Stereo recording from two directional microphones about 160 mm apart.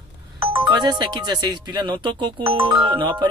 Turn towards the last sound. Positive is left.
turn(degrees=-30)  # may be behind; listen again after turning